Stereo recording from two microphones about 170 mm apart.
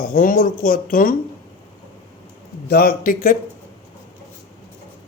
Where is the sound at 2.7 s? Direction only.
65° left (ahead or behind).